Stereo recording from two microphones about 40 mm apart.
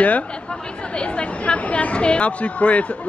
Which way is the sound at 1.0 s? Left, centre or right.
Left.